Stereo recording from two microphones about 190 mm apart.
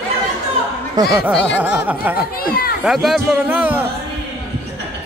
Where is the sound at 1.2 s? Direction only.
Centre (ahead or behind).